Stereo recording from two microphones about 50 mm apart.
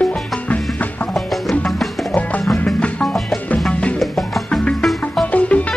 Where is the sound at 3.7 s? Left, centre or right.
Left.